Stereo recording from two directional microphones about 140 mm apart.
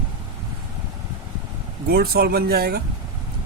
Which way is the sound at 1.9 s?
90° right.